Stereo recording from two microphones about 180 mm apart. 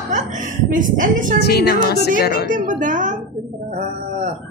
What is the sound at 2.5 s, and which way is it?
Speech, 45° right (ahead or behind).